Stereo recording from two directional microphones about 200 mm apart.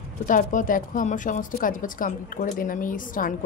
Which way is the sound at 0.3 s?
40° left (ahead or behind).